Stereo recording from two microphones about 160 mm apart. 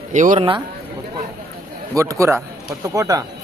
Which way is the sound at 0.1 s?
50° right (ahead or behind).